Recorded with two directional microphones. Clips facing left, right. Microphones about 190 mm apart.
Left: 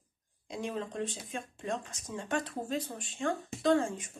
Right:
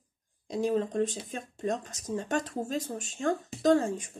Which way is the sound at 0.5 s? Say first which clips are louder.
Right 8 dB; 40° right (ahead or behind).